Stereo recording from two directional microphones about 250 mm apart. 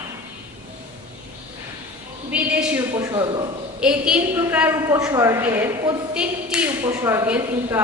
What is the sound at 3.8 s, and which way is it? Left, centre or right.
A woman's voice, centre.